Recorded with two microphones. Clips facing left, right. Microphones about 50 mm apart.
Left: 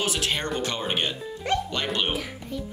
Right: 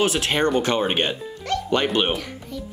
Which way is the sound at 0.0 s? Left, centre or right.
Right.